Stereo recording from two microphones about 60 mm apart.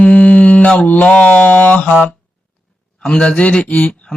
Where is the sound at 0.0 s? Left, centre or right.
Left.